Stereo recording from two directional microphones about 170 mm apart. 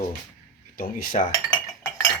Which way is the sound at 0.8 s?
55° left (ahead or behind).